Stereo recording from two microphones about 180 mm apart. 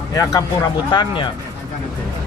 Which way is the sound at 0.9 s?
25° left (ahead or behind).